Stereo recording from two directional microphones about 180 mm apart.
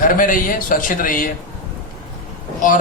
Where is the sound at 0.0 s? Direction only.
50° left (ahead or behind).